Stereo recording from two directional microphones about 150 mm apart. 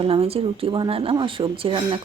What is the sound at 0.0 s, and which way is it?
A woman's voice, 40° right (ahead or behind).